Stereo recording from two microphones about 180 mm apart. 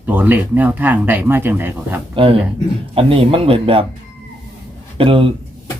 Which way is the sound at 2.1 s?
30° right (ahead or behind).